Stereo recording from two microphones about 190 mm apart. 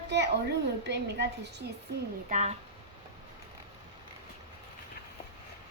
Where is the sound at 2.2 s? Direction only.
40° right (ahead or behind).